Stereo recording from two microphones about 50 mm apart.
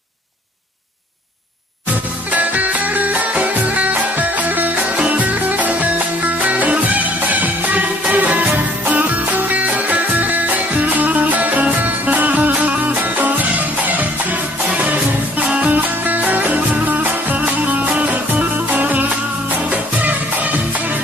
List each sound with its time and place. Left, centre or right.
2.3 s music: right